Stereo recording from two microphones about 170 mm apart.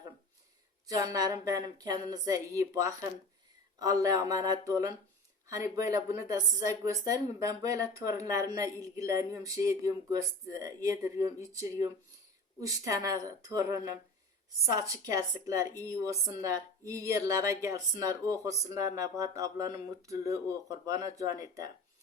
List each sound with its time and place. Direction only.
0.9 s a woman's voice: 20° right (ahead or behind)